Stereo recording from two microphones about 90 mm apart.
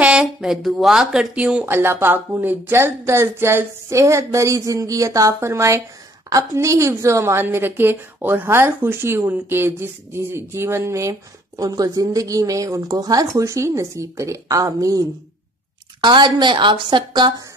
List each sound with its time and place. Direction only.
0.0 s speech: 10° right (ahead or behind)
1.7 s a woman's voice: 25° right (ahead or behind); by 13.3 s 45° right (ahead or behind)
13.3 s a woman's voice: 35° right (ahead or behind)
16.0 s a woman's voice: 55° right (ahead or behind)